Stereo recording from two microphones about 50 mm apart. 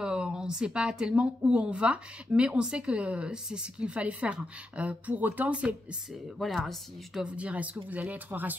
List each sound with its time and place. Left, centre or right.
0.0 s speech: centre; by 5.5 s right
5.5 s speech: right
6.4 s speech: centre
7.2 s speech: right